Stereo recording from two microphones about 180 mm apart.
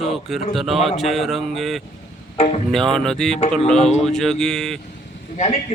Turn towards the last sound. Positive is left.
turn(degrees=40)  # may be behind; listen again after turning